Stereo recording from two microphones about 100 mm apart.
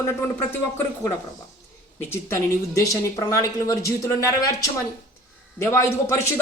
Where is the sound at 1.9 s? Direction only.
25° left (ahead or behind).